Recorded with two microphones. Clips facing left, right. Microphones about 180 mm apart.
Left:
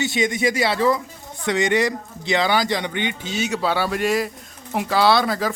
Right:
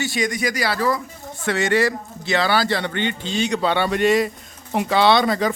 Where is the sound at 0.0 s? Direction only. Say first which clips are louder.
Left 2 dB; 20° left (ahead or behind).